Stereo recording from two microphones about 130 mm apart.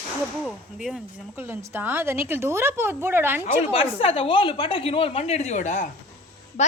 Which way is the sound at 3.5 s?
50° left (ahead or behind).